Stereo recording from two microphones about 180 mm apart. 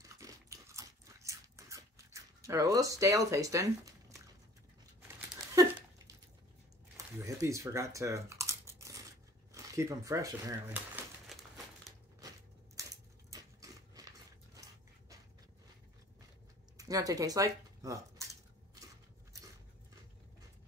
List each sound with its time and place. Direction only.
0.2 s biting: 15° right (ahead or behind)
5.5 s a sound: 15° right (ahead or behind)
7.2 s typing: 15° right (ahead or behind)
9.5 s speech: 15° right (ahead or behind)
11.9 s crushing: centre (ahead or behind)
12.7 s a sound: 20° right (ahead or behind)
16.7 s speech: 20° right (ahead or behind)